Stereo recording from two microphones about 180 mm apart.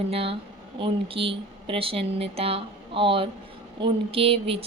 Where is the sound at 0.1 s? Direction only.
30° right (ahead or behind).